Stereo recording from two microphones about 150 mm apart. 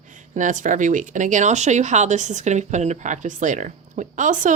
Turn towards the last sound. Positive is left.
turn(degrees=-60)  # may be behind; listen again after turning